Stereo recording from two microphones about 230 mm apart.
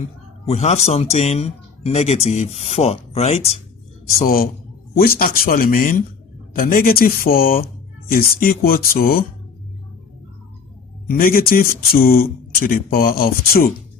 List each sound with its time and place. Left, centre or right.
0.4 s speech: left
4.2 s speech: left
11.1 s speech: left